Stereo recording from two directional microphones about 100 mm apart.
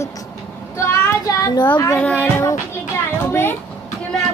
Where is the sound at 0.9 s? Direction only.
25° left (ahead or behind).